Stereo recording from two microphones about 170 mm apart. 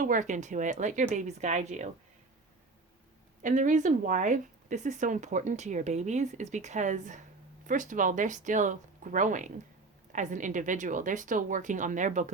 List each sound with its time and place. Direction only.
0.0 s speech: 50° right (ahead or behind)
3.4 s speech: 50° right (ahead or behind)